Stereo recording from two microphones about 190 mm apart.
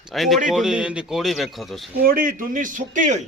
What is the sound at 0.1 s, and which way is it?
A man's voice, centre (ahead or behind).